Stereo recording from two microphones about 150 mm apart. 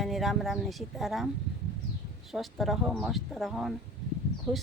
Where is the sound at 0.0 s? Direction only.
Centre (ahead or behind).